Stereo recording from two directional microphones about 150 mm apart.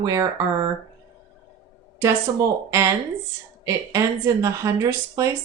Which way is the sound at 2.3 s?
20° right (ahead or behind).